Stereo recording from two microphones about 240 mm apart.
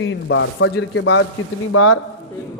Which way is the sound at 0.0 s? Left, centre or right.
Left.